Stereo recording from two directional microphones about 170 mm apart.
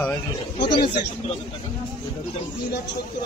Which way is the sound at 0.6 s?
75° left (ahead or behind).